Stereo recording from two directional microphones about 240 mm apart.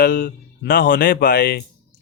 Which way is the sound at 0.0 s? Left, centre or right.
Left.